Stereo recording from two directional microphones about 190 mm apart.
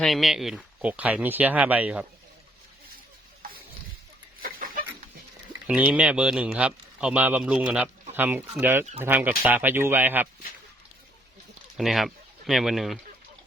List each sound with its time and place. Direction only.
0.0 s speech: centre (ahead or behind)
4.4 s chicken: 50° right (ahead or behind)
5.6 s speech: 5° right (ahead or behind)
11.8 s speech: centre (ahead or behind)